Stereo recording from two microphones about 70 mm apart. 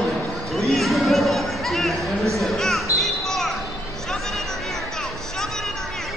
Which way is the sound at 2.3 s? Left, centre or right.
Centre.